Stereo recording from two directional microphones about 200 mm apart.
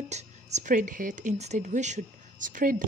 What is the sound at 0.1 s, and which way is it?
Speech, 35° right (ahead or behind).